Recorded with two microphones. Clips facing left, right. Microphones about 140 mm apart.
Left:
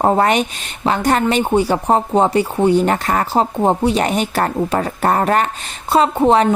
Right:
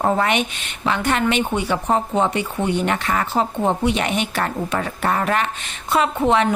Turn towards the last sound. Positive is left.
turn(degrees=35)  # may be behind; listen again after turning